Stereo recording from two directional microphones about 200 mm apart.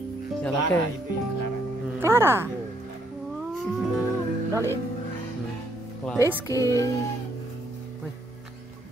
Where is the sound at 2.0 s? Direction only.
10° right (ahead or behind).